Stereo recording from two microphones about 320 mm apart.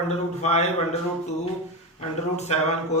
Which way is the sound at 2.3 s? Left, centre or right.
Left.